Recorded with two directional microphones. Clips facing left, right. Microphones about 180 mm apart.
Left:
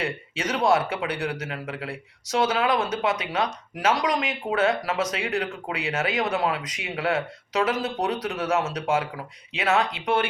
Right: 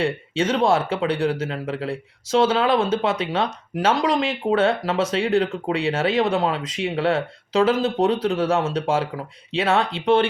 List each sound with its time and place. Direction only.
0.0 s speech: 30° right (ahead or behind)